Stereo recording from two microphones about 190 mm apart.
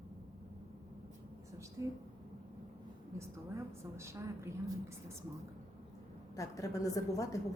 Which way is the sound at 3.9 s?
15° right (ahead or behind).